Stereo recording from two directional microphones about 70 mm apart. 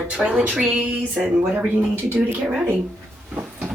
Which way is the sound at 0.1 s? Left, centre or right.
Centre.